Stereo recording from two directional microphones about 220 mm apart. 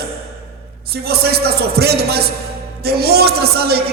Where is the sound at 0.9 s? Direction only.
45° right (ahead or behind).